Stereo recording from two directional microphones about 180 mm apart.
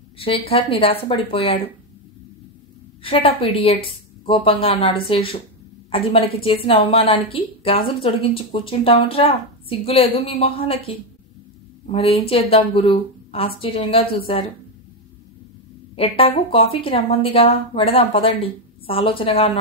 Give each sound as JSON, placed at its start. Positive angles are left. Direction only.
{"t": 0.2, "sound": "a woman's voice", "side_deg": 30}
{"t": 3.0, "sound": "a woman's voice", "side_deg": 30}
{"t": 16.0, "sound": "a woman's voice", "side_deg": 30}